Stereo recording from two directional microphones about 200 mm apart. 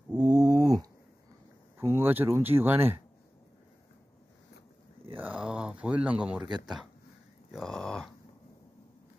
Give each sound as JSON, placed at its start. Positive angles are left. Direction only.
{"t": 0.1, "sound": "dog", "side_deg": -20}
{"t": 1.8, "sound": "speech", "side_deg": -10}
{"t": 5.1, "sound": "a sound", "side_deg": -10}
{"t": 7.5, "sound": "speech", "side_deg": 0}